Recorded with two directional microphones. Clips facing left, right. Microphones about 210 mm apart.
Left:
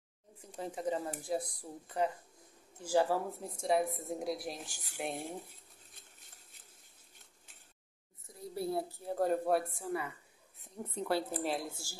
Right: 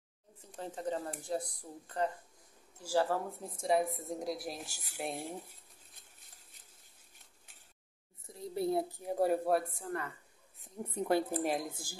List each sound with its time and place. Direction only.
0.4 s speech: 10° left (ahead or behind)
3.3 s a woman's voice: centre (ahead or behind)
8.3 s a woman's voice: 20° right (ahead or behind); by 10.1 s 5° left (ahead or behind)
10.6 s a woman's voice: 10° right (ahead or behind)